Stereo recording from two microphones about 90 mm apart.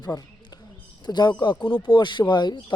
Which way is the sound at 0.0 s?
45° left (ahead or behind).